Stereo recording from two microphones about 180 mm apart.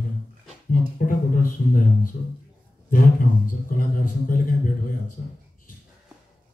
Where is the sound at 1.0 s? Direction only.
50° left (ahead or behind).